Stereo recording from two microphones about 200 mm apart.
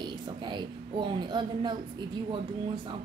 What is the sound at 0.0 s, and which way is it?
A woman's voice, 20° right (ahead or behind).